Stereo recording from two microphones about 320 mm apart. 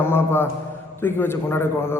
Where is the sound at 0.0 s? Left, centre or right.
Centre.